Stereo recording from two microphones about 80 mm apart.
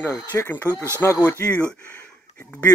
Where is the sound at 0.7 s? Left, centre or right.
Right.